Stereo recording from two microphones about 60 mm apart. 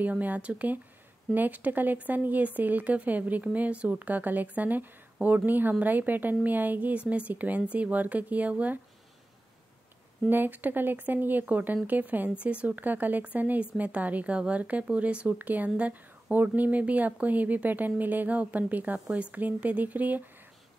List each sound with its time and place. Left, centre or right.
0.0 s speech: right
10.3 s speech: right